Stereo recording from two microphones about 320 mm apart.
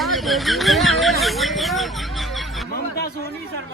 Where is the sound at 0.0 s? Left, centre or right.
Centre.